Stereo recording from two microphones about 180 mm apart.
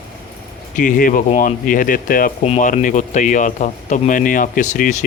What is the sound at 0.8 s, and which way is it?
Speech, 50° left (ahead or behind).